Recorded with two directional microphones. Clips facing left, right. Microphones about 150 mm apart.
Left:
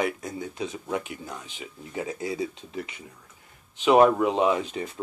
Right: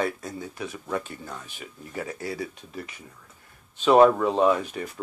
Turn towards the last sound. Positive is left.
turn(degrees=25)  # may be behind; listen again after turning